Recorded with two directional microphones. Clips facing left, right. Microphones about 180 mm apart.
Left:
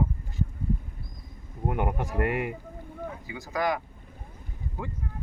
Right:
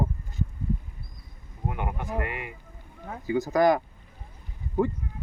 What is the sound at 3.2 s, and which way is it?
Speech, 45° right (ahead or behind).